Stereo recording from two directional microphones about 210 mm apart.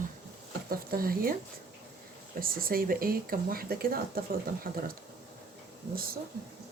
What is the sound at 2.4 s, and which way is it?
Speech, 45° right (ahead or behind).